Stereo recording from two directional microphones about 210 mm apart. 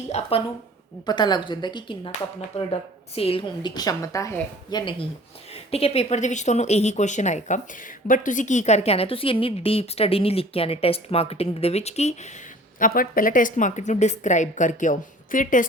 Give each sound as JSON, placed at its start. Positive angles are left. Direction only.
{"t": 0.1, "sound": "a woman's voice", "side_deg": 30}
{"t": 12.8, "sound": "speech", "side_deg": 40}